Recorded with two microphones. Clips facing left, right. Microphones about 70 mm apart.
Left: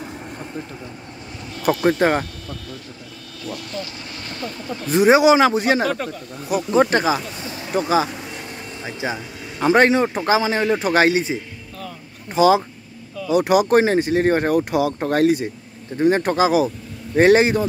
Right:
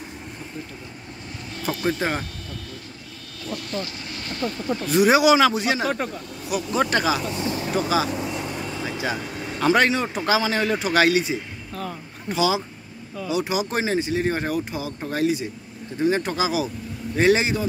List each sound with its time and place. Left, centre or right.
2.0 s speech: left
3.4 s speech: centre
4.4 s speech: centre
4.8 s speech: left
8.8 s speech: centre
12.4 s speech: left